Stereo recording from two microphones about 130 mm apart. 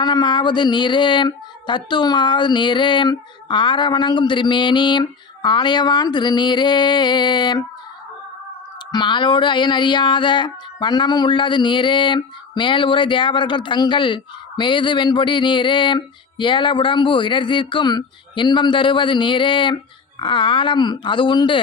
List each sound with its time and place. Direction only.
0.0 s speech: 35° left (ahead or behind)
8.9 s speech: 35° left (ahead or behind)